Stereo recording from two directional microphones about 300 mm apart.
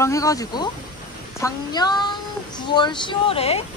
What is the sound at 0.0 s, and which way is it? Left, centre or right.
Speech, centre.